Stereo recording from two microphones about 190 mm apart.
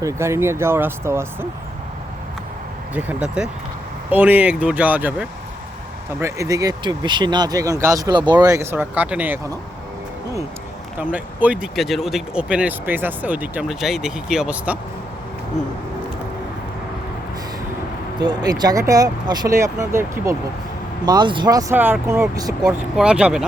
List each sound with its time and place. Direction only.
0.0 s speech: 15° right (ahead or behind)
2.9 s speech: 5° right (ahead or behind)
11.1 s speech: 5° right (ahead or behind)
18.2 s speech: 20° right (ahead or behind)
23.0 s speech: 5° right (ahead or behind)